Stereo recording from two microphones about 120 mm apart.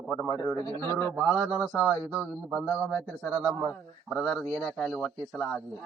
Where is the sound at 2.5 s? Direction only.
5° left (ahead or behind).